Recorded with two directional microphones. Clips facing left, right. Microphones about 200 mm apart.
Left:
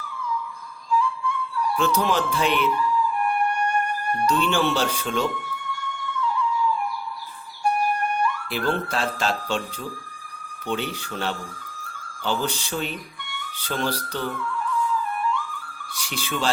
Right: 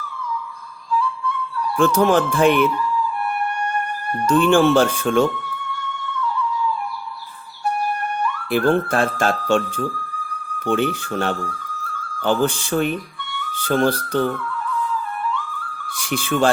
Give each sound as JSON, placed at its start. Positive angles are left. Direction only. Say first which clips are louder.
{"t": 1.8, "sound": "speech", "louder": "right 8 dB", "side_deg": -50}
{"t": 4.3, "sound": "speech", "louder": "right 9 dB", "side_deg": -50}
{"t": 8.4, "sound": "speech", "louder": "right 8 dB", "side_deg": -50}
{"t": 15.9, "sound": "speech", "louder": "right 8 dB", "side_deg": -50}